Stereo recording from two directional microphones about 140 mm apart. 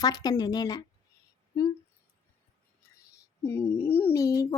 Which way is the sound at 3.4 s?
15° left (ahead or behind).